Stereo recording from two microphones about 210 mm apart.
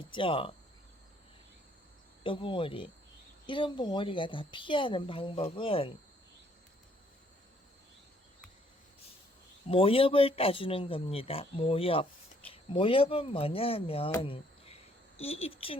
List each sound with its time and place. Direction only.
0.1 s a woman's voice: 25° left (ahead or behind)
2.2 s a woman's voice: 25° left (ahead or behind)
9.6 s a woman's voice: 25° left (ahead or behind)
14.2 s a sound: 30° left (ahead or behind)
15.2 s a woman's voice: 30° left (ahead or behind)